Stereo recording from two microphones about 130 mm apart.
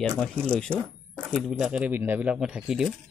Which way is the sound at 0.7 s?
10° right (ahead or behind).